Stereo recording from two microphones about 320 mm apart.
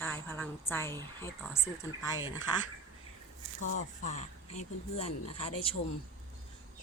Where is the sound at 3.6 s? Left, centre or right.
Left.